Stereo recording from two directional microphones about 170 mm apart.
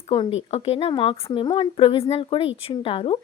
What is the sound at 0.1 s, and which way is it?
A woman's voice, 35° left (ahead or behind).